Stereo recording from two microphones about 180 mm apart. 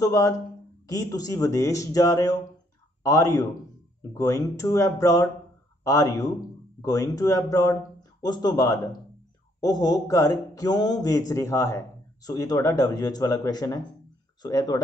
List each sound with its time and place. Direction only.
0.0 s a man's voice: 20° left (ahead or behind)